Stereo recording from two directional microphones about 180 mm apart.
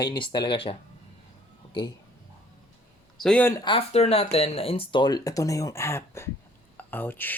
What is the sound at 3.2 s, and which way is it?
Speech, 5° left (ahead or behind).